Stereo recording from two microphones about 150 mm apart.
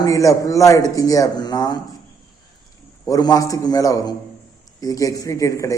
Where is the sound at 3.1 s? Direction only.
25° left (ahead or behind).